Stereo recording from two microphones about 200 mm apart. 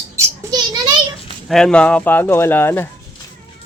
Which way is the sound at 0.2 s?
20° right (ahead or behind).